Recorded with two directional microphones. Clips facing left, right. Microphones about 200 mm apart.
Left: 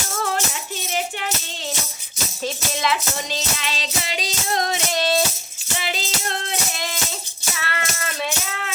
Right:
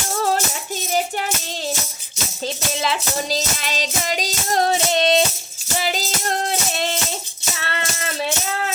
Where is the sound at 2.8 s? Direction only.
35° right (ahead or behind).